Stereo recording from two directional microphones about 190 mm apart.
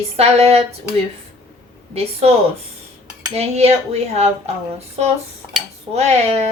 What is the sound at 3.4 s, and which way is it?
Speech, 35° right (ahead or behind).